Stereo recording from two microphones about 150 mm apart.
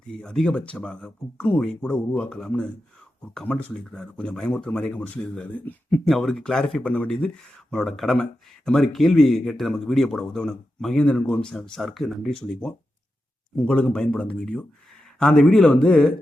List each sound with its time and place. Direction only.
0.1 s speech: 5° left (ahead or behind)